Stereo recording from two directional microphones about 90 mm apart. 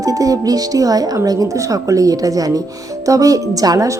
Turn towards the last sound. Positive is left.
turn(degrees=-40)  # may be behind; listen again after turning